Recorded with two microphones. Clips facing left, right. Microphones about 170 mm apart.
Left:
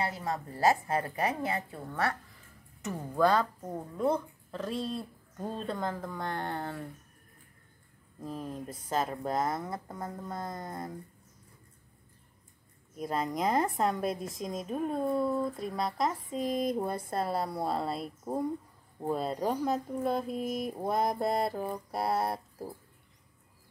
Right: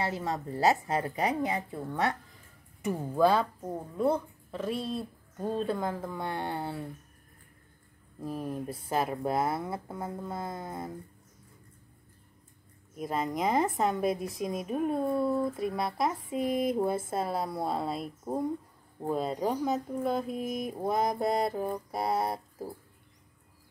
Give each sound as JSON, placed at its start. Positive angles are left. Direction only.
{"t": 0.0, "sound": "speech", "side_deg": -20}
{"t": 2.8, "sound": "speech", "side_deg": -10}
{"t": 8.2, "sound": "speech", "side_deg": -10}
{"t": 12.9, "sound": "speech", "side_deg": 0}